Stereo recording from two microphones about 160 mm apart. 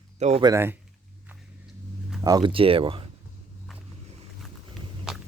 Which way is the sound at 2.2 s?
25° right (ahead or behind).